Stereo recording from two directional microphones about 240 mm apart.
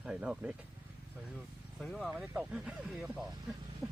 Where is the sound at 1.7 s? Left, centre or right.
Centre.